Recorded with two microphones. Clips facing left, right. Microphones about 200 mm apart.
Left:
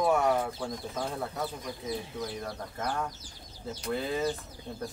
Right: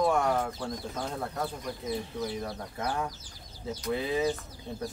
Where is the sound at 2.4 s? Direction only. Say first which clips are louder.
Right 1 dB; 10° right (ahead or behind).